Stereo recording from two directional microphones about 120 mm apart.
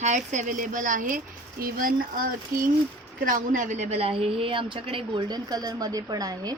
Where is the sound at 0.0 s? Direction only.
90° right.